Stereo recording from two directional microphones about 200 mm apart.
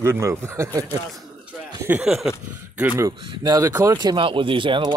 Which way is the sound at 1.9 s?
Centre (ahead or behind).